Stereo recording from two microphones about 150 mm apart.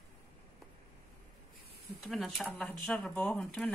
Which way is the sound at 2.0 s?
Centre (ahead or behind).